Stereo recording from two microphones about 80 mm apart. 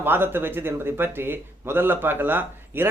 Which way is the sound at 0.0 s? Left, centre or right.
Right.